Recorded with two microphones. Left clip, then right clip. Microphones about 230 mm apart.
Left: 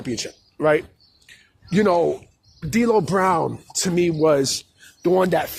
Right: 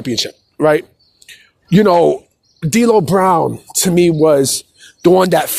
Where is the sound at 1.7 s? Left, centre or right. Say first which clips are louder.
Right 8 dB; right.